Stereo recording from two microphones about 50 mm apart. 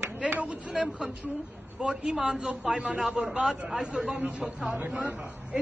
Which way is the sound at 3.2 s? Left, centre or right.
Right.